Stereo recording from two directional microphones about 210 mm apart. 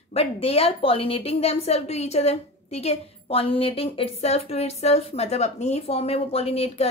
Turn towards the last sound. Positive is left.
turn(degrees=30)  # may be behind; listen again after turning